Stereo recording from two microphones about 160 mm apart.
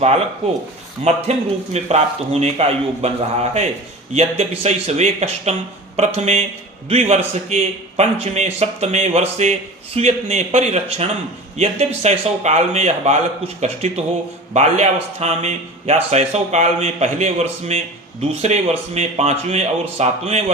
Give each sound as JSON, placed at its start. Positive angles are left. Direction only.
{"t": 1.0, "sound": "a man's voice", "side_deg": -45}